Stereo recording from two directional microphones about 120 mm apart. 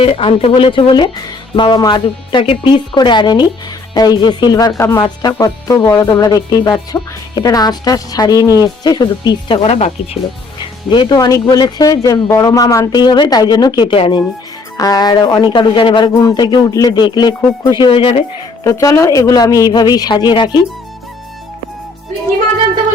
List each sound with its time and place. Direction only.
0.0 s speech: 50° left (ahead or behind)
13.9 s speech: 50° left (ahead or behind)
14.8 s speech: 35° left (ahead or behind)
17.8 s speech: 50° left (ahead or behind)
18.6 s speech: 30° left (ahead or behind)